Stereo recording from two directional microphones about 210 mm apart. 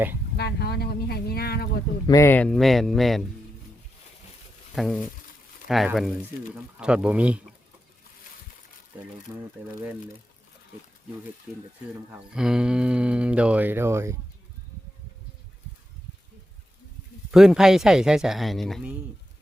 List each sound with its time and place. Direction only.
0.3 s speech: 50° left (ahead or behind)
2.0 s speech: 15° left (ahead or behind)
4.7 s speech: centre (ahead or behind)
11.5 s speech: 5° right (ahead or behind)
17.3 s speech: 5° right (ahead or behind)